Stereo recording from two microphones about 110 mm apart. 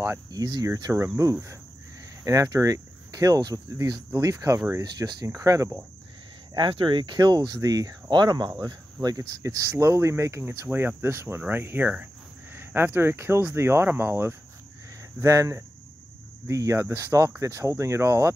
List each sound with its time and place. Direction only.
0.3 s speech: 35° right (ahead or behind)
6.5 s speech: 50° right (ahead or behind); by 18.3 s 25° right (ahead or behind)